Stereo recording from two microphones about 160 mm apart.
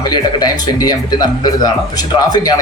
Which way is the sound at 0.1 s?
25° left (ahead or behind).